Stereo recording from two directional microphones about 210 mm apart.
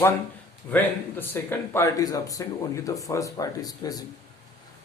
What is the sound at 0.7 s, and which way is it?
Speech, 10° left (ahead or behind).